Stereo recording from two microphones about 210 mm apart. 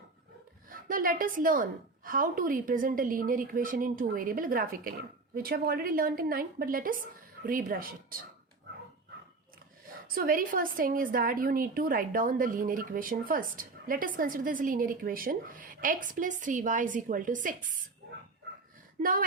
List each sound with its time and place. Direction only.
0.7 s a woman's voice: 40° right (ahead or behind)
10.2 s a woman's voice: 40° right (ahead or behind)
19.0 s a woman's voice: 40° right (ahead or behind)